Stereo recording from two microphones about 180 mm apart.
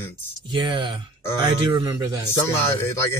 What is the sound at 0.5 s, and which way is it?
Speech, 25° right (ahead or behind).